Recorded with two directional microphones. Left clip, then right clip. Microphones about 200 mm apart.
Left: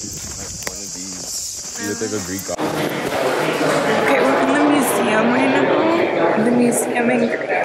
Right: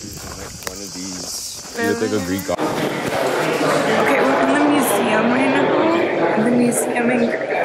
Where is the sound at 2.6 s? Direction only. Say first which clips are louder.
Left 3 dB; centre (ahead or behind).